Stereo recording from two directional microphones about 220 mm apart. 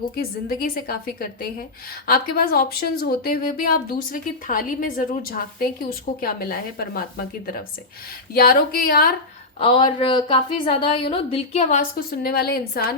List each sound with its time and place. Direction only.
0.2 s a woman's voice: 45° left (ahead or behind)
9.6 s a woman's voice: 25° left (ahead or behind); by 12.8 s 45° left (ahead or behind)